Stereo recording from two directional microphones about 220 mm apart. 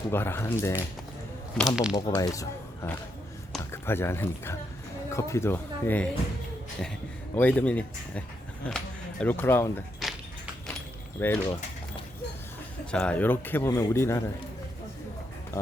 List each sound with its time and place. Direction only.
0.1 s a man's voice: 10° left (ahead or behind)
1.5 s speech: centre (ahead or behind)
2.0 s a man's voice: 15° left (ahead or behind)
7.3 s a man's voice: 5° left (ahead or behind)
10.0 s a sound: centre (ahead or behind)
11.2 s a man's voice: 15° left (ahead or behind)
12.8 s a man's voice: 5° left (ahead or behind)
15.6 s a man's voice: 15° left (ahead or behind)